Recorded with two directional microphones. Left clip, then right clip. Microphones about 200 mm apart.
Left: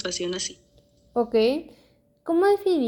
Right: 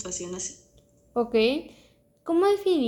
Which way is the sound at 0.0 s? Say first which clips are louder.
Left 6 dB; 45° left (ahead or behind).